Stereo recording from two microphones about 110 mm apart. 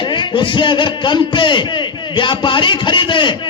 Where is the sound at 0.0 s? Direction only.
50° left (ahead or behind).